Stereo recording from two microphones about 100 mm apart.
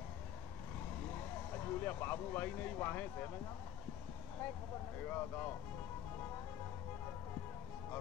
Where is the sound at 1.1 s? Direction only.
20° left (ahead or behind).